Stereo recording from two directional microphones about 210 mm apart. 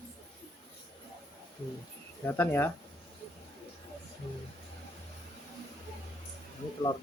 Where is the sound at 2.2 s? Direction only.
10° left (ahead or behind).